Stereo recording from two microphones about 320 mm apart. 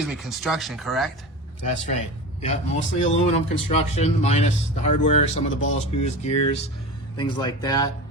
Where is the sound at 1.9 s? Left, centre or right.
Left.